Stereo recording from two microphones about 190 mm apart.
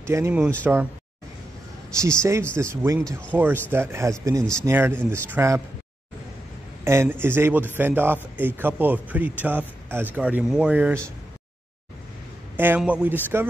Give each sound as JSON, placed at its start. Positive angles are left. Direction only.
{"t": 0.0, "sound": "a man's voice", "side_deg": -15}
{"t": 2.0, "sound": "a man's voice", "side_deg": -15}
{"t": 6.8, "sound": "a man's voice", "side_deg": -15}
{"t": 12.5, "sound": "a man's voice", "side_deg": -10}